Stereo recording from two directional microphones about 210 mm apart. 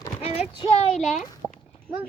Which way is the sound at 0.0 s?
25° left (ahead or behind).